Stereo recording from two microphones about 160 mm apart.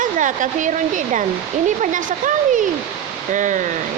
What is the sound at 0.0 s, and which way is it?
Speech, 55° right (ahead or behind).